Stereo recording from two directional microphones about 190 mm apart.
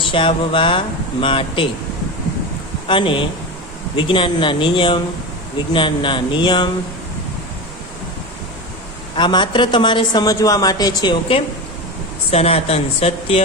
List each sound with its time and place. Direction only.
0.0 s a man's voice: 25° left (ahead or behind)
2.8 s a man's voice: 25° left (ahead or behind)
9.1 s a man's voice: 25° left (ahead or behind)